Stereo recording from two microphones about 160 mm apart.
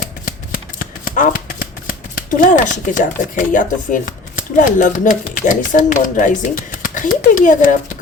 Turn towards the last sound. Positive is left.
turn(degrees=55)  # may be behind; listen again after turning